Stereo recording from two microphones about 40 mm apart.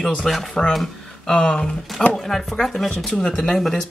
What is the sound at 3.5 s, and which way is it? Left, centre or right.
Speech, centre.